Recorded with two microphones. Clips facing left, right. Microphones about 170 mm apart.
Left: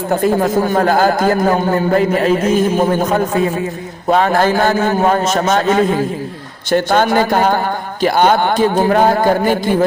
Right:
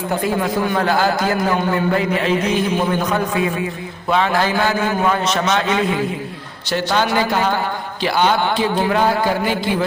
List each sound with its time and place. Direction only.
0.1 s a man's voice: 45° left (ahead or behind)